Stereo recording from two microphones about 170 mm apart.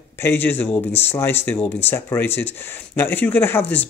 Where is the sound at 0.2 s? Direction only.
10° left (ahead or behind).